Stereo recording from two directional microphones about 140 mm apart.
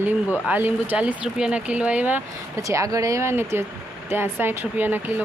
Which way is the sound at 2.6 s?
25° right (ahead or behind).